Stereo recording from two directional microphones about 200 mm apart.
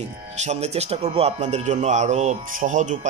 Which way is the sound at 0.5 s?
35° right (ahead or behind).